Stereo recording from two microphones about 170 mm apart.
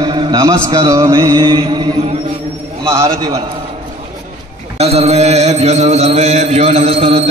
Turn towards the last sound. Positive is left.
turn(degrees=-35)  # may be behind; listen again after turning